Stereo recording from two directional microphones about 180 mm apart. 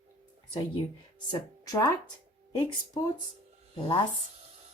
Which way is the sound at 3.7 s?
30° left (ahead or behind).